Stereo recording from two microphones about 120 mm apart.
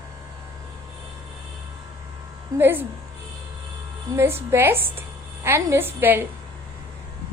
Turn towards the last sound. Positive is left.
turn(degrees=-15)  # may be behind; listen again after turning